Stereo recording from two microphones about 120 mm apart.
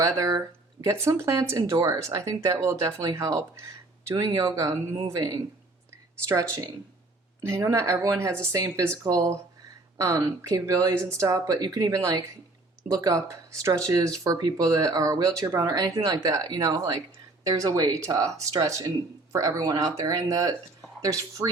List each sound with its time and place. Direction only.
0.0 s speech: 30° right (ahead or behind)
10.0 s speech: 30° right (ahead or behind)